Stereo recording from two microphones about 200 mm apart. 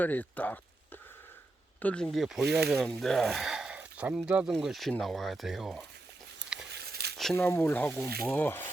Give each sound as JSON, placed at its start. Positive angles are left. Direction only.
{"t": 0.0, "sound": "speech", "side_deg": 10}
{"t": 1.8, "sound": "speech", "side_deg": 5}
{"t": 6.7, "sound": "a sound", "side_deg": -55}
{"t": 7.3, "sound": "speech", "side_deg": 10}